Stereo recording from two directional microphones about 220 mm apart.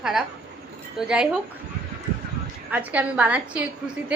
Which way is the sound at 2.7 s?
5° right (ahead or behind).